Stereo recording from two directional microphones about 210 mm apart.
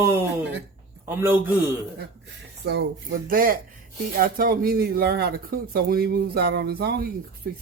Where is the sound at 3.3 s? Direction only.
45° right (ahead or behind).